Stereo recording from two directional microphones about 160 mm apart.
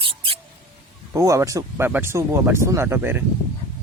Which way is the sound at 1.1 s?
20° right (ahead or behind).